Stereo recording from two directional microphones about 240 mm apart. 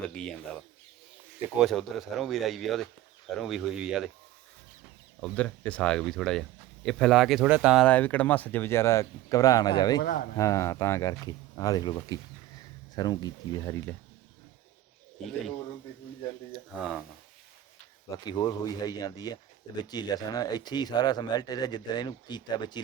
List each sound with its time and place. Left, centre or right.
0.0 s speech: centre
1.5 s speech: centre
5.2 s speech: centre
10.0 s speech: left
10.3 s speech: centre
16.5 s speech: centre
18.3 s speech: centre